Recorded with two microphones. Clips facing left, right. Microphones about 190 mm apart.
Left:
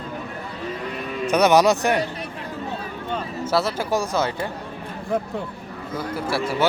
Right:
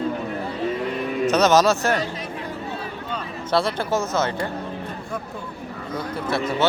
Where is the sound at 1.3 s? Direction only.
15° left (ahead or behind).